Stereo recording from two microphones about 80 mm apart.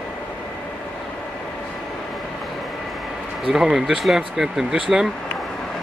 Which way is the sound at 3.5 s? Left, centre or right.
Centre.